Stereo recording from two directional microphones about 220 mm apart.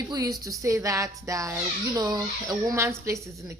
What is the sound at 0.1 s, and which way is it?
A woman's voice, 15° right (ahead or behind).